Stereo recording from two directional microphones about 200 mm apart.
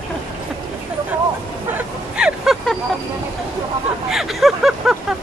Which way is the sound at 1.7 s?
5° right (ahead or behind).